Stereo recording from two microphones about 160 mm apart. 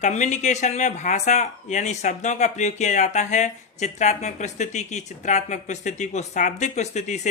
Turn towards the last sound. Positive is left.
turn(degrees=45)  # may be behind; listen again after turning